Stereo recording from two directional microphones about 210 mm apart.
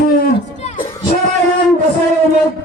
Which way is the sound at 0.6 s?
35° left (ahead or behind).